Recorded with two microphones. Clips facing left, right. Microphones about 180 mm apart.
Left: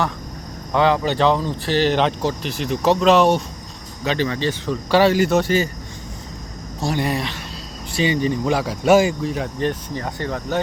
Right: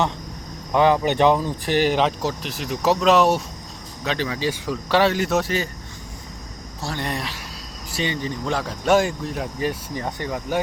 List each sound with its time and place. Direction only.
0.7 s speech: 15° right (ahead or behind)
2.0 s speech: centre (ahead or behind)
6.8 s speech: 10° left (ahead or behind); by 10.0 s 5° right (ahead or behind)
10.0 s speech: 15° right (ahead or behind)